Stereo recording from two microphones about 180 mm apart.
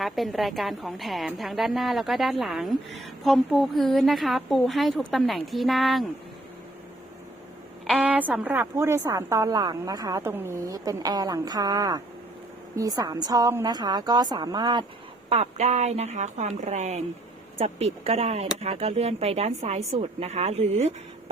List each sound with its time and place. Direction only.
0.0 s a woman's voice: centre (ahead or behind)
7.9 s a woman's voice: 5° right (ahead or behind); by 14.8 s 25° right (ahead or behind)
15.3 s a woman's voice: 35° right (ahead or behind)